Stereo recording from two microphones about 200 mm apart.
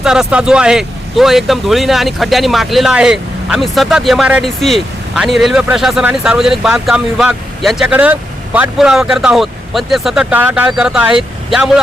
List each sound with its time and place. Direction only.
0.0 s speech: 5° right (ahead or behind)